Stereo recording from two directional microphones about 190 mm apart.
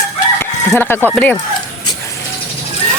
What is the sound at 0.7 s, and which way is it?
Speech, 10° left (ahead or behind).